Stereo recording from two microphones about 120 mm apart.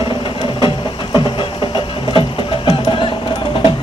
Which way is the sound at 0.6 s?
40° left (ahead or behind).